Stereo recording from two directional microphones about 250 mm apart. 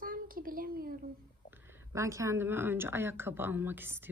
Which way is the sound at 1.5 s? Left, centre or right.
Centre.